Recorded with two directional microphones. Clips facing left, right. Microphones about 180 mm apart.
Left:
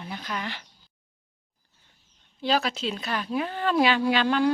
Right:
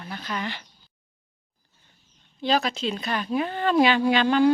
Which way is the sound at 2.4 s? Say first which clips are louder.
Right 2 dB; 5° left (ahead or behind).